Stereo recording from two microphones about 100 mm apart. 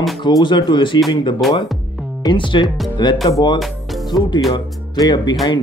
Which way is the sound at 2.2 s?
50° left (ahead or behind).